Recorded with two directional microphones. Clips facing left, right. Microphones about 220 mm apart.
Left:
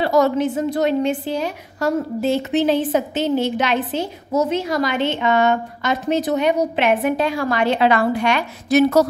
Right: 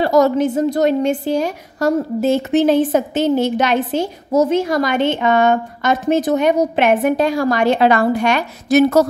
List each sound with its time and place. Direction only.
0.0 s a woman's voice: 45° right (ahead or behind)